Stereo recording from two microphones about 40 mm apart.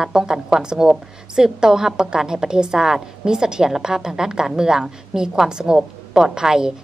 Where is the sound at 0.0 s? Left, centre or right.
Centre.